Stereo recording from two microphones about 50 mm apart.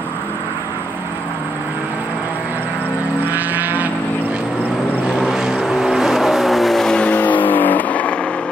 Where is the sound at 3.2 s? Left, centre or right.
Right.